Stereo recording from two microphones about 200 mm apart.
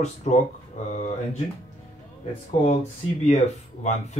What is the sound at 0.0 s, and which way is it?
Speech, 35° left (ahead or behind).